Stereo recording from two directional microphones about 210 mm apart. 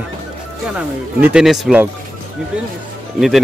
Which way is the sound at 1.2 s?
5° right (ahead or behind).